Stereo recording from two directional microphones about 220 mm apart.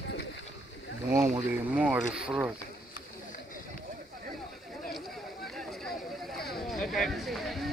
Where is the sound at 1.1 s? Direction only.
5° right (ahead or behind).